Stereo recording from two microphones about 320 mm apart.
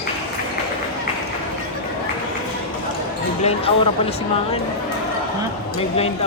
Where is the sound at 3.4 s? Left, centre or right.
Centre.